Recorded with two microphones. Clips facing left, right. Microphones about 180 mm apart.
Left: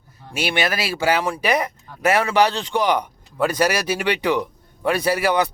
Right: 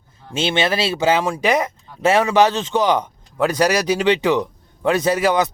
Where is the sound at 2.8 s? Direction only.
15° left (ahead or behind).